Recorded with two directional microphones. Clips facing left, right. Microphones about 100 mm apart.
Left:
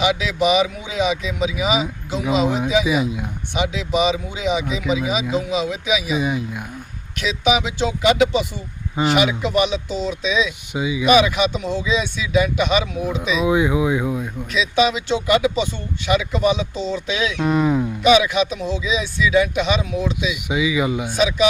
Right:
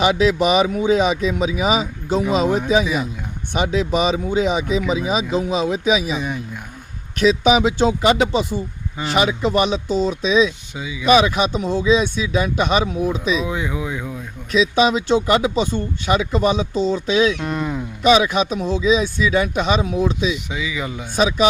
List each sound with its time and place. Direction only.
0.0 s speech: 40° right (ahead or behind)
6.1 s speech: 5° left (ahead or behind)
7.2 s speech: 40° right (ahead or behind)
10.8 s speech: 20° left (ahead or behind)
11.0 s speech: 40° right (ahead or behind)
13.4 s speech: 15° left (ahead or behind)
14.5 s speech: 40° right (ahead or behind)
17.4 s speech: 5° left (ahead or behind)
18.0 s speech: 40° right (ahead or behind)
20.5 s speech: 15° left (ahead or behind)
21.2 s speech: 40° right (ahead or behind)